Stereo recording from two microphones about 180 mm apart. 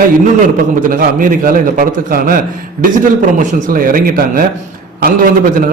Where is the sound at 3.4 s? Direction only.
50° right (ahead or behind).